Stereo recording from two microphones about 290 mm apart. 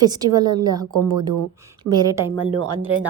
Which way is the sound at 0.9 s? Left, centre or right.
Right.